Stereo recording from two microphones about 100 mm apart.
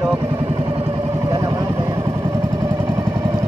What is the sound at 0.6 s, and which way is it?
Vehicle, 75° right (ahead or behind).